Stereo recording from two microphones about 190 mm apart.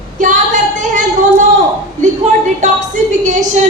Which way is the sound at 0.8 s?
40° right (ahead or behind).